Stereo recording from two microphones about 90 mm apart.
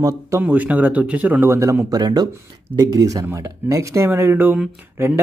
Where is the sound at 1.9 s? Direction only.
45° right (ahead or behind).